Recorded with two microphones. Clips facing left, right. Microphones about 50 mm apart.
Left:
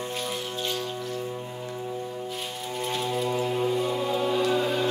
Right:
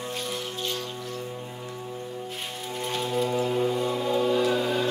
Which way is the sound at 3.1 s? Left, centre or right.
Centre.